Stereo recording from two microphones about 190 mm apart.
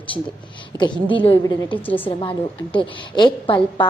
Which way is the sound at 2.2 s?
25° left (ahead or behind).